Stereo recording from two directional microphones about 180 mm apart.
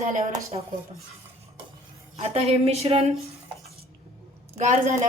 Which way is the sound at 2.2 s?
35° right (ahead or behind).